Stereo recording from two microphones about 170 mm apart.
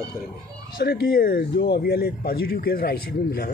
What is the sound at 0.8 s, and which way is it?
Speech, 60° left (ahead or behind).